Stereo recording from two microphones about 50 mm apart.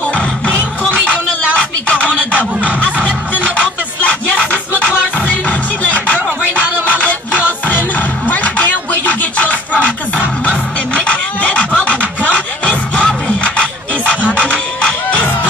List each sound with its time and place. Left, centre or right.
1.9 s a sound: left
3.0 s music: right
5.5 s music: left
6.1 s music: right
7.4 s music: left
11.0 s music: left